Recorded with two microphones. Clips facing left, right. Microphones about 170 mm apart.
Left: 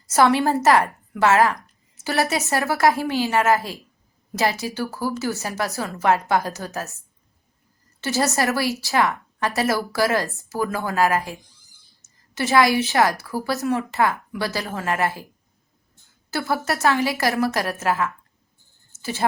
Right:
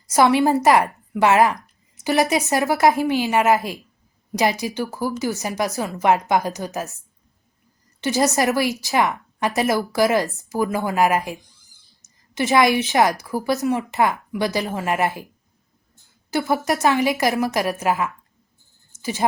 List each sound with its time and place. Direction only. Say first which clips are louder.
0.1 s a woman's voice: right 2 dB; 15° right (ahead or behind)
8.0 s a woman's voice: right 3 dB; 15° right (ahead or behind)
16.3 s a woman's voice: right 3 dB; 20° right (ahead or behind)